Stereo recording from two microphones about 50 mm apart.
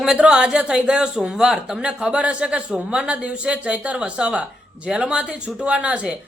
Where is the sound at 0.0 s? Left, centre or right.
Centre.